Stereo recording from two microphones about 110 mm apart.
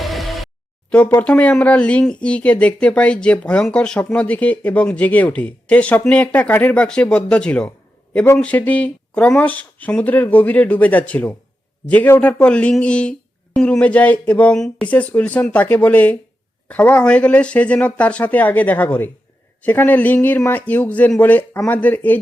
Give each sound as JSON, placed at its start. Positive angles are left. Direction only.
{"t": 0.0, "sound": "music", "side_deg": 0}
{"t": 0.9, "sound": "a sound", "side_deg": 10}
{"t": 1.2, "sound": "speech", "side_deg": 10}